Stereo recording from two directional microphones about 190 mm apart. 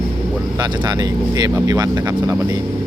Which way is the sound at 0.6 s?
20° right (ahead or behind).